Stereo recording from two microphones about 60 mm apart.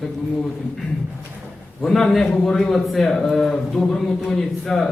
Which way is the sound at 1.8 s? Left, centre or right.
Centre.